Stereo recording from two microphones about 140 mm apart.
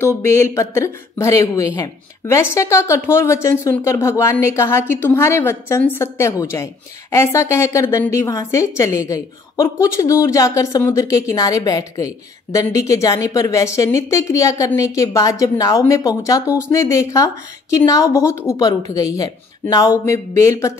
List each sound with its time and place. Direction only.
0.0 s a woman's voice: 20° left (ahead or behind)